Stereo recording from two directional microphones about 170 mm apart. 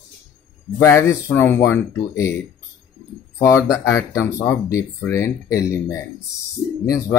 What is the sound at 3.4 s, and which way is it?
Speech, 15° left (ahead or behind).